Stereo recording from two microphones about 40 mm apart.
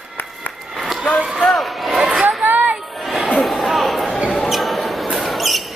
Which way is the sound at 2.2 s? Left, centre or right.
Right.